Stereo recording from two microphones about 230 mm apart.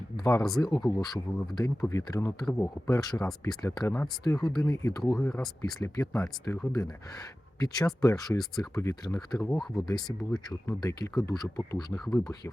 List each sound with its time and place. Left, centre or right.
0.2 s a man's voice: centre
5.0 s speech: centre
5.8 s a man's voice: centre
10.3 s a man's voice: centre
11.9 s speech: centre